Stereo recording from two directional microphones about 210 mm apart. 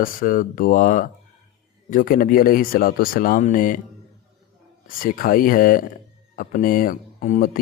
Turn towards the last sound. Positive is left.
turn(degrees=45)  # may be behind; listen again after turning